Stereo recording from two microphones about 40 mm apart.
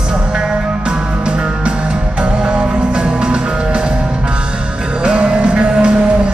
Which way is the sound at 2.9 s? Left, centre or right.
Right.